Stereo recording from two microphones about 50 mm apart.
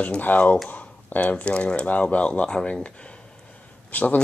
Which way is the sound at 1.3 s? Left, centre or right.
Left.